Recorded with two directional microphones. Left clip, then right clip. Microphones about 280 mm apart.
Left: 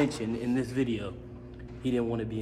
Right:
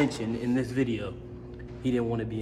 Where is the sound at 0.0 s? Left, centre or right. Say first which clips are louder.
Right 1 dB; centre.